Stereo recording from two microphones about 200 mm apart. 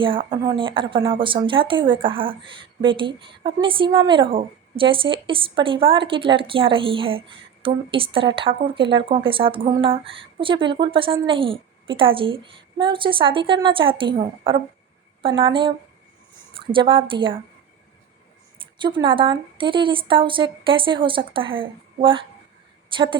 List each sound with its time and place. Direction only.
0.0 s a woman's voice: 25° right (ahead or behind)
18.8 s a woman's voice: 25° right (ahead or behind)